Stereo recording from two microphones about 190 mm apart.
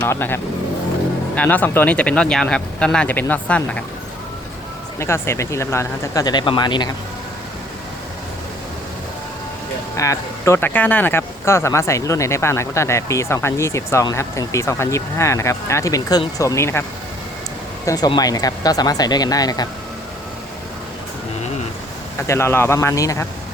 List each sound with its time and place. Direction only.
0.0 s speech: 10° left (ahead or behind)
1.4 s speech: 10° left (ahead or behind)
4.9 s speech: 15° left (ahead or behind)
9.9 s speech: 15° left (ahead or behind)
17.8 s speech: 20° left (ahead or behind)
22.3 s speech: 15° left (ahead or behind)